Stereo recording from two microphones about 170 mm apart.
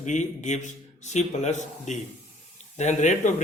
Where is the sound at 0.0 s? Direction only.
45° left (ahead or behind).